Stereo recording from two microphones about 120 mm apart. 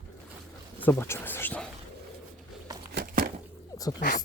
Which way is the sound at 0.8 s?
20° left (ahead or behind).